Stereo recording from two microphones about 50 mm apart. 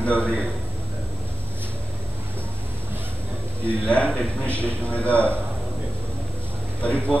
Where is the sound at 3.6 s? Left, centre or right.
Left.